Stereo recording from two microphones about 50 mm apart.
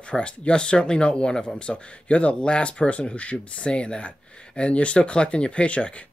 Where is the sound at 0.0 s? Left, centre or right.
Left.